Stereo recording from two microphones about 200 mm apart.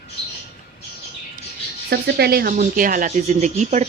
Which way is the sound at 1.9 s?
50° right (ahead or behind).